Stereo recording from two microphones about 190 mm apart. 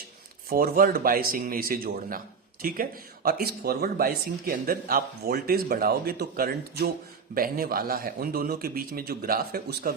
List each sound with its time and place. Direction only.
0.5 s speech: 50° right (ahead or behind)